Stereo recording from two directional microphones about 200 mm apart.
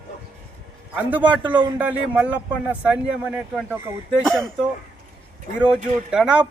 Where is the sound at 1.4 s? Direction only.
20° right (ahead or behind).